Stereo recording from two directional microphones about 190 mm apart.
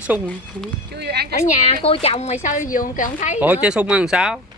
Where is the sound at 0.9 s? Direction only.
60° right (ahead or behind).